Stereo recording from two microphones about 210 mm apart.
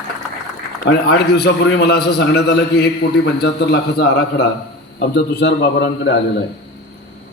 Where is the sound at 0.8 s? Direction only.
50° left (ahead or behind).